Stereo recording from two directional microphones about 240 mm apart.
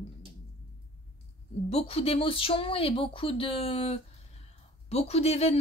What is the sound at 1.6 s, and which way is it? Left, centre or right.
Speech, left.